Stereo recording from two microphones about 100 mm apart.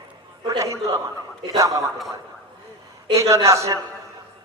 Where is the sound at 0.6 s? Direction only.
30° right (ahead or behind).